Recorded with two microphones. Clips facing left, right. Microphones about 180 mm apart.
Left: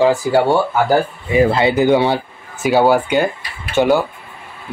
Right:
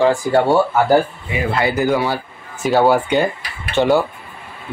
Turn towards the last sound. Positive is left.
turn(degrees=0)  # may be behind; listen again after turning